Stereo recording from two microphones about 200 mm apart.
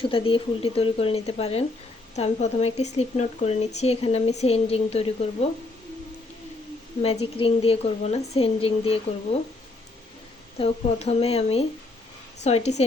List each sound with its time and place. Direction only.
0.0 s a woman's voice: 25° left (ahead or behind)
7.0 s a woman's voice: 30° left (ahead or behind)
10.6 s speech: 30° left (ahead or behind)